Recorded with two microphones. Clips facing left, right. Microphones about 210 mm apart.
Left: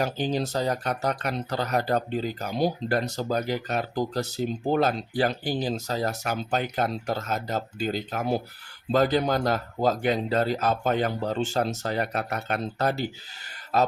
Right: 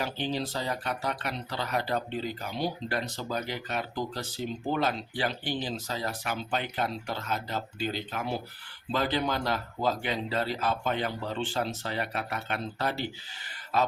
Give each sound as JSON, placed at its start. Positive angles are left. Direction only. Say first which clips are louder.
{"t": 0.0, "sound": "speech", "louder": "left 5 dB", "side_deg": 45}